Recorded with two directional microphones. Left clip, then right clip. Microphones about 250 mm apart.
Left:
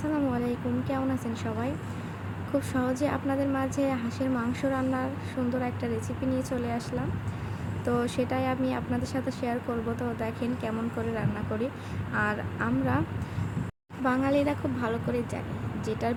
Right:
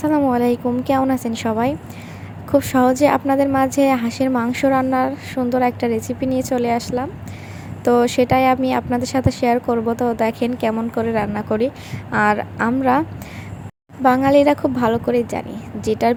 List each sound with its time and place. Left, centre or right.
0.0 s a woman's voice: right
14.0 s speech: right